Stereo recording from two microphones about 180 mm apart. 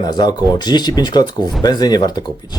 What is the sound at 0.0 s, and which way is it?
Speech, 20° left (ahead or behind).